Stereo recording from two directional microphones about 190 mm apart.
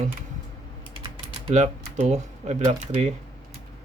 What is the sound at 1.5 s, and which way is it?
Speech, 35° right (ahead or behind).